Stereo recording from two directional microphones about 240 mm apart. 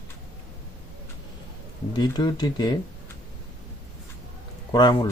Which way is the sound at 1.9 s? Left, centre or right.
Centre.